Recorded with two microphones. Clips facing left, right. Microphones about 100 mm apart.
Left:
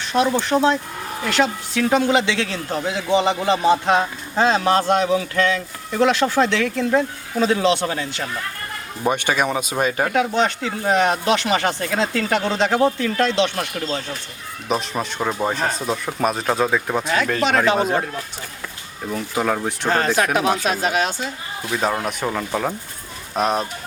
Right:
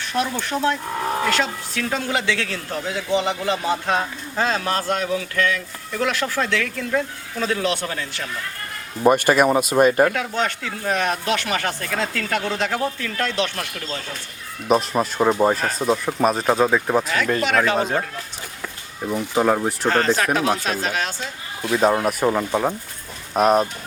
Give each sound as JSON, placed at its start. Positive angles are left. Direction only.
{"t": 0.0, "sound": "speech", "side_deg": 20}
{"t": 9.3, "sound": "speech", "side_deg": -5}
{"t": 10.1, "sound": "speech", "side_deg": 20}
{"t": 14.7, "sound": "speech", "side_deg": 0}
{"t": 19.1, "sound": "speech", "side_deg": -10}
{"t": 19.9, "sound": "speech", "side_deg": 15}
{"t": 21.6, "sound": "speech", "side_deg": 0}
{"t": 23.3, "sound": "speech", "side_deg": -5}